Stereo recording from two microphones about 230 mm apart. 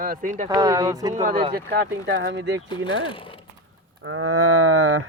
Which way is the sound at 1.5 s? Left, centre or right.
Right.